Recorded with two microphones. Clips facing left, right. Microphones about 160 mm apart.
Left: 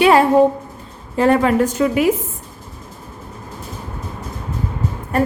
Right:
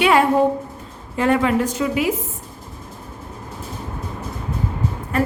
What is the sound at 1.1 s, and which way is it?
Speech, 35° left (ahead or behind).